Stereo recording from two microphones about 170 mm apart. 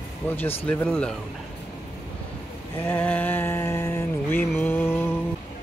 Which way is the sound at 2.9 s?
10° left (ahead or behind).